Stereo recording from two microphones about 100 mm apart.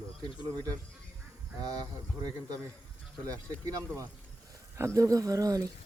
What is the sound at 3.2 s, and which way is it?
Speech, 35° right (ahead or behind).